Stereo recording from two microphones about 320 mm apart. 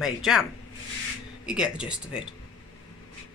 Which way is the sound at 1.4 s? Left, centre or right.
Centre.